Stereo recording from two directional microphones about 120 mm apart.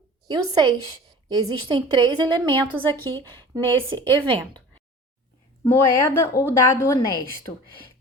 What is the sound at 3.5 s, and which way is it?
Speech, 45° right (ahead or behind).